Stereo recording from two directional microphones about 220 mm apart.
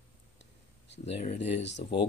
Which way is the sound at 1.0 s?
30° left (ahead or behind).